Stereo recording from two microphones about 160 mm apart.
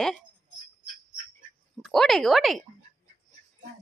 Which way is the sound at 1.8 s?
Centre (ahead or behind).